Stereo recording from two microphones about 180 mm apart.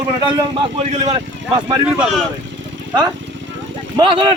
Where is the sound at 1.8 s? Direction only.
Centre (ahead or behind).